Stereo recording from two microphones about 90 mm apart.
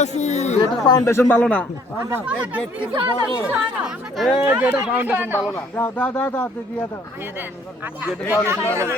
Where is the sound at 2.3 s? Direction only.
15° right (ahead or behind).